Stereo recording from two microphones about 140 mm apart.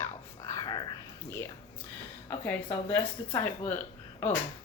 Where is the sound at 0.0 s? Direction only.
20° left (ahead or behind).